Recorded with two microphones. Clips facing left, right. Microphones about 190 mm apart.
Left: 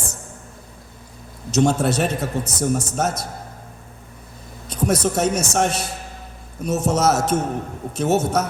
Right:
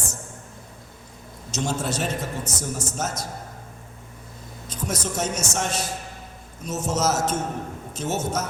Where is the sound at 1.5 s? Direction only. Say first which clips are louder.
Left 9 dB; 65° left (ahead or behind).